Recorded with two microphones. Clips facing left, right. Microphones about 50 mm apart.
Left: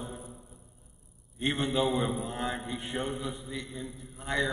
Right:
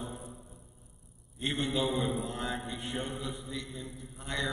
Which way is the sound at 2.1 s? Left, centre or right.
Centre.